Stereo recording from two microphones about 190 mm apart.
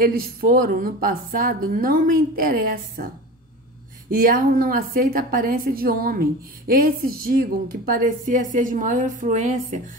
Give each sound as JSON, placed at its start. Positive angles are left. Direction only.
{"t": 0.0, "sound": "a woman's voice", "side_deg": -50}
{"t": 4.1, "sound": "a woman's voice", "side_deg": -50}